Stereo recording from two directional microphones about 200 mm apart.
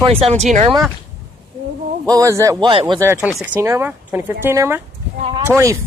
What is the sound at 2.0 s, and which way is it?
Speech, 15° right (ahead or behind).